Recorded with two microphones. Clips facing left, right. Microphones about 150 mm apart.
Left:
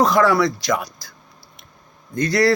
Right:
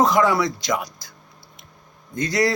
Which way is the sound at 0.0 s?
15° right (ahead or behind).